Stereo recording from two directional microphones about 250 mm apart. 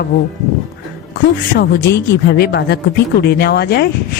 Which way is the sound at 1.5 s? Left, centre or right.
Left.